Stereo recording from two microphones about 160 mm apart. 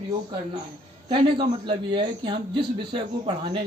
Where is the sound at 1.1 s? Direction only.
30° right (ahead or behind).